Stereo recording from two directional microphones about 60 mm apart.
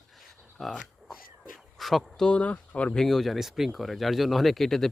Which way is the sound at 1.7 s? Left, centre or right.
Centre.